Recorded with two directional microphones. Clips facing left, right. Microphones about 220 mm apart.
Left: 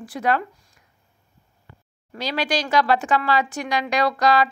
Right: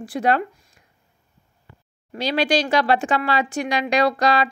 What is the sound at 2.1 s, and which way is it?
Speech, 30° right (ahead or behind).